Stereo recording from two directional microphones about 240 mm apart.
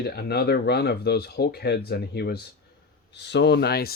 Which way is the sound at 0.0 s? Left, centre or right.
Left.